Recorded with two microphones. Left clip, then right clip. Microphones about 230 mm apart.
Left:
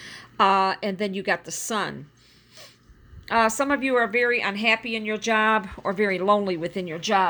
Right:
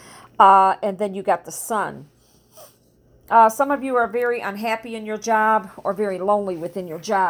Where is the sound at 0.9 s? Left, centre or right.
Left.